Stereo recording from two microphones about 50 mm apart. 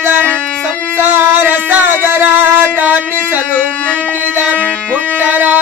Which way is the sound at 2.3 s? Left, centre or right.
Right.